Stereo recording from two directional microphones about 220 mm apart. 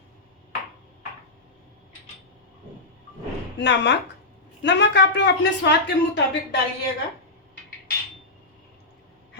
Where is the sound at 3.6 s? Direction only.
50° left (ahead or behind).